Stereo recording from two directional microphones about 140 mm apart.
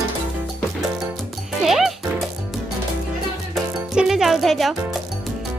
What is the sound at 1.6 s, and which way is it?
Music, centre (ahead or behind).